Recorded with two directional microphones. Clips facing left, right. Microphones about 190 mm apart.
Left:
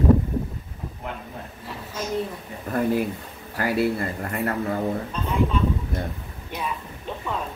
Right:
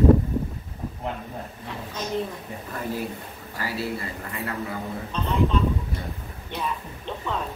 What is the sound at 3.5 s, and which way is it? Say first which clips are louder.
A man's voice: left 7 dB; 55° left (ahead or behind).